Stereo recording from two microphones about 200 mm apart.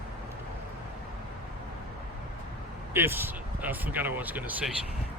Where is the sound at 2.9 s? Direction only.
10° right (ahead or behind).